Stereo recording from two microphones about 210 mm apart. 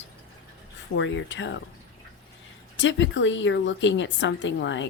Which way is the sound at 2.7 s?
60° left (ahead or behind).